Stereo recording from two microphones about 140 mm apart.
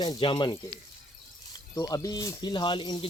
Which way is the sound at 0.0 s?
35° left (ahead or behind).